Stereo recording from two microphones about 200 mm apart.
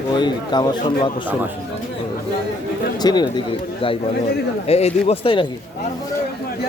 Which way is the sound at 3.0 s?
20° left (ahead or behind).